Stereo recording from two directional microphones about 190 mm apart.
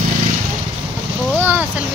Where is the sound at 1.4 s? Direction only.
10° right (ahead or behind).